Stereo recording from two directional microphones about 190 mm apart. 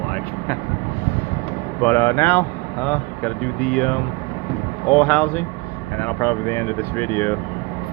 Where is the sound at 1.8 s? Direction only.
10° left (ahead or behind).